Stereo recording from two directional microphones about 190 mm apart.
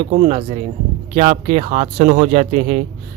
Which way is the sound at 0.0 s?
30° right (ahead or behind).